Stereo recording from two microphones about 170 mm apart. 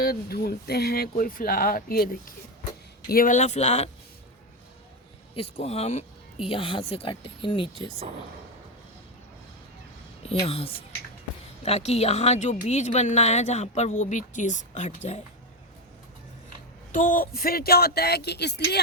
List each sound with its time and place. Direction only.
0.0 s speech: 65° left (ahead or behind); by 3.8 s 40° left (ahead or behind)
5.3 s speech: 35° left (ahead or behind)
10.4 s speech: 35° left (ahead or behind)
16.9 s speech: 55° left (ahead or behind); by 18.8 s 80° left